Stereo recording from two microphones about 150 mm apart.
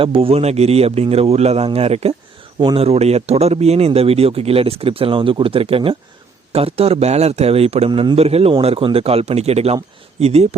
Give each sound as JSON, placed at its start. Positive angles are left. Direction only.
{"t": 0.0, "sound": "speech", "side_deg": -40}